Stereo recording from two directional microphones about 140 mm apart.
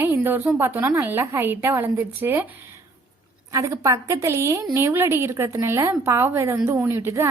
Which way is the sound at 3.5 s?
25° right (ahead or behind).